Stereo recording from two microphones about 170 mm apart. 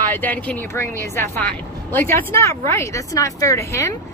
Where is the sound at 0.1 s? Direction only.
10° left (ahead or behind).